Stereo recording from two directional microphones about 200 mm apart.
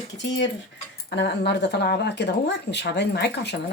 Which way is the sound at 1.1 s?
60° left (ahead or behind).